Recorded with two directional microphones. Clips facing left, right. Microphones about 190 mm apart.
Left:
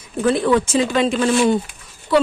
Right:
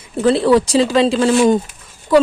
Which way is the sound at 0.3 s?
35° right (ahead or behind).